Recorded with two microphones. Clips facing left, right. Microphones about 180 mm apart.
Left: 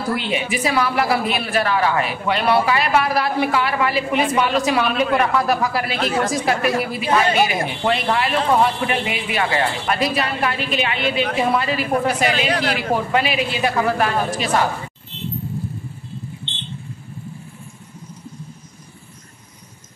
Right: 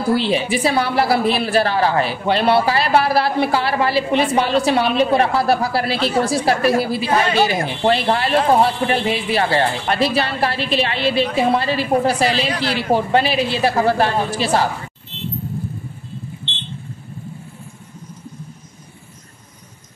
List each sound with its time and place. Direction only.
0.1 s a man's voice: 30° right (ahead or behind)